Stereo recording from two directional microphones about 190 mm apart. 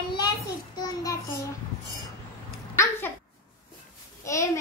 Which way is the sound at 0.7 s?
20° left (ahead or behind).